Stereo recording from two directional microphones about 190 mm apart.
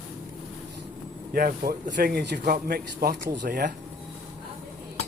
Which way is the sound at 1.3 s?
50° right (ahead or behind).